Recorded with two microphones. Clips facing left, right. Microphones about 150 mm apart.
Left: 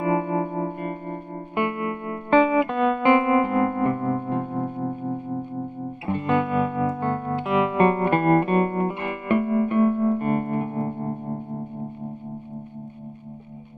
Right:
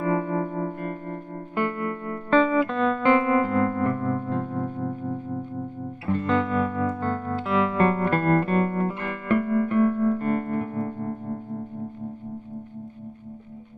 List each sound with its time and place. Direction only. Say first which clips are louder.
0.0 s music: left 2 dB; 15° left (ahead or behind)